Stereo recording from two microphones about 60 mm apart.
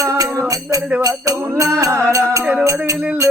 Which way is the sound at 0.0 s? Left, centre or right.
Right.